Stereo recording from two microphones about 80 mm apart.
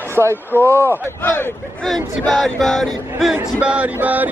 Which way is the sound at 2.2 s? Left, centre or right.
Centre.